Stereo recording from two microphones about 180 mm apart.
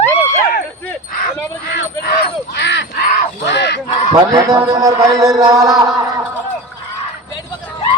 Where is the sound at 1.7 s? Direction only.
60° left (ahead or behind).